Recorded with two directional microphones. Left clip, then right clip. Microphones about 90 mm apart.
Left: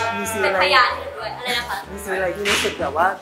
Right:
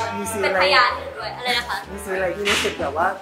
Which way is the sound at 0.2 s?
Centre (ahead or behind).